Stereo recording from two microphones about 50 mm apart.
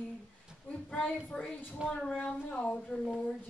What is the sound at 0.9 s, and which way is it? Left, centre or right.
Music, centre.